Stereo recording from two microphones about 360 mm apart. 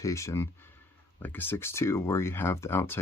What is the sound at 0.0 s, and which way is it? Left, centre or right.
Speech, centre.